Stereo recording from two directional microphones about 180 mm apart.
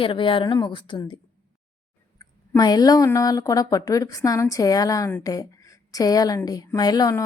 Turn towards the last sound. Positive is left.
turn(degrees=20)  # may be behind; listen again after turning